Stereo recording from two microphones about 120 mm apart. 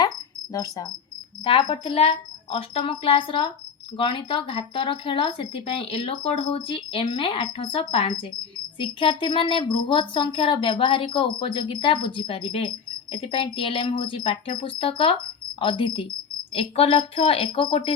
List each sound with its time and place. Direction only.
0.5 s cricket: 30° left (ahead or behind)
1.5 s speech: 50° left (ahead or behind)